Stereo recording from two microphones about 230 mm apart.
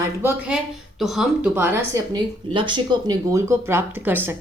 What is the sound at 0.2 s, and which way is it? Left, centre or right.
A woman's voice, centre.